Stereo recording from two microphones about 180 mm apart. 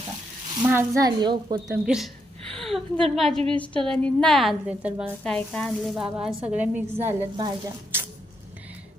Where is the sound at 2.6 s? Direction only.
Centre (ahead or behind).